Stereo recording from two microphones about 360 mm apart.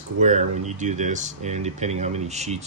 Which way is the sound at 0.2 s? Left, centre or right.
Centre.